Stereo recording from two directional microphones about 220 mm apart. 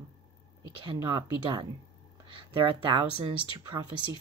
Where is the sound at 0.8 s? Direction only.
15° right (ahead or behind).